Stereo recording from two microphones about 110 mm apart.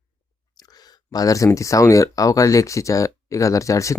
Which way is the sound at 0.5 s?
35° left (ahead or behind).